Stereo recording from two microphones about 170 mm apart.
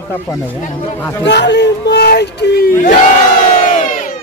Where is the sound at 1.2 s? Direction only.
90° left; by 2.7 s 70° left (ahead or behind).